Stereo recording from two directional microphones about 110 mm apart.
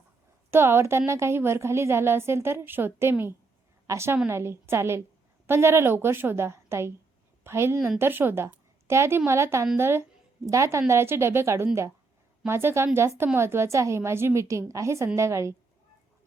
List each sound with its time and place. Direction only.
0.5 s a woman's voice: 20° right (ahead or behind)